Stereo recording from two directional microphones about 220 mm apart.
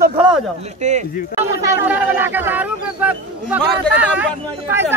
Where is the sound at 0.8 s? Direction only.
30° right (ahead or behind).